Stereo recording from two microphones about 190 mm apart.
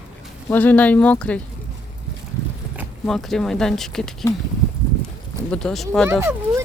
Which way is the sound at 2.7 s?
Centre (ahead or behind).